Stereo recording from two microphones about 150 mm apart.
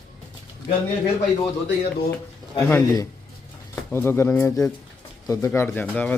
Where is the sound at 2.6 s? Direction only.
10° left (ahead or behind).